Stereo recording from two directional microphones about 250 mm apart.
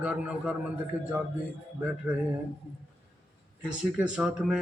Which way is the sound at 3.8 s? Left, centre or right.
Centre.